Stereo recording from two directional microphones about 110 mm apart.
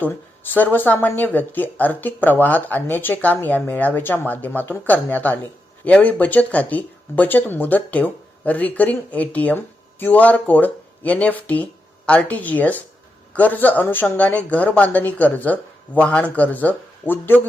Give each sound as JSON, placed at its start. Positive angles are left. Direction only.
{"t": 0.5, "sound": "speech", "side_deg": 15}